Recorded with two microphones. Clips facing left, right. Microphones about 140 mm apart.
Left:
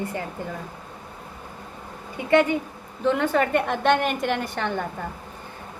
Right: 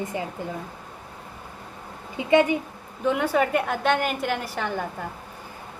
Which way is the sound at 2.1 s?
15° right (ahead or behind).